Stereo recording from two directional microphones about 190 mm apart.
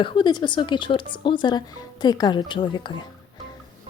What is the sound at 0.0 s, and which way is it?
A woman's voice, 25° left (ahead or behind).